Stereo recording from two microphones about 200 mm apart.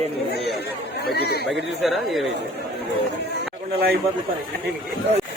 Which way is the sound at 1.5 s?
Centre (ahead or behind).